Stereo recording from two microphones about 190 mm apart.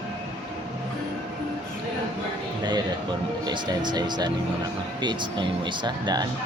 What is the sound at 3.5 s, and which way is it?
Speech, 25° right (ahead or behind).